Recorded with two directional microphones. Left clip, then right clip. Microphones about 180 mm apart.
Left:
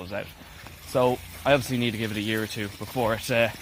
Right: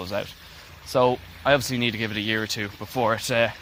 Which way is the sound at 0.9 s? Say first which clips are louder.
Right 3 dB; 20° right (ahead or behind).